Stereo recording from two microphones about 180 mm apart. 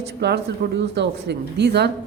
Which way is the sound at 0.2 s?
70° right (ahead or behind).